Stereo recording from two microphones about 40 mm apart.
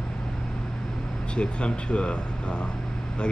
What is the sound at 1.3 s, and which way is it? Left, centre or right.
Speech, left.